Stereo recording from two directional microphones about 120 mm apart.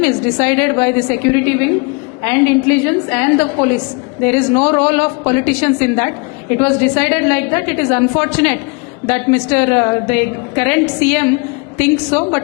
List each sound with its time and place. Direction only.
0.0 s a woman's voice: 15° left (ahead or behind)